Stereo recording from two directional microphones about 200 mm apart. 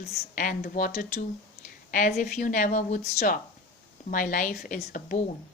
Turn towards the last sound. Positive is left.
turn(degrees=40)  # may be behind; listen again after turning